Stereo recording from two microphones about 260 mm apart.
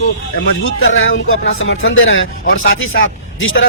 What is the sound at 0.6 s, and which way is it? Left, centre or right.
Speech, left.